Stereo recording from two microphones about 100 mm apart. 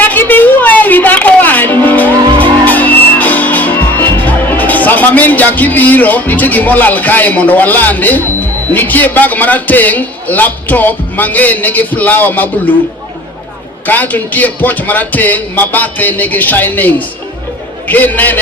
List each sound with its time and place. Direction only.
0.0 s a sound: 20° left (ahead or behind)
2.6 s music: 15° left (ahead or behind)
4.3 s a man's voice: 15° left (ahead or behind)
13.8 s a man's voice: 15° left (ahead or behind)